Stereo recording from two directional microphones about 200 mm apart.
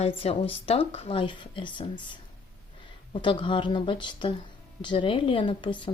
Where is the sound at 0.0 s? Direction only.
30° left (ahead or behind).